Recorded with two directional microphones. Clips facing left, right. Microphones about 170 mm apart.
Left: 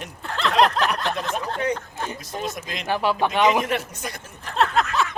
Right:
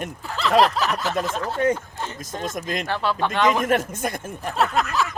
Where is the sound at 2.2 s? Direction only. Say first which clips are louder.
Even; 45° right (ahead or behind).